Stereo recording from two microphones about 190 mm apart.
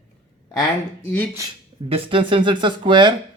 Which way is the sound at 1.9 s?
30° right (ahead or behind).